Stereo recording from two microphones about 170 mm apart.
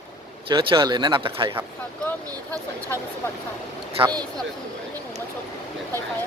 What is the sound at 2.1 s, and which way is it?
Speech, 10° left (ahead or behind).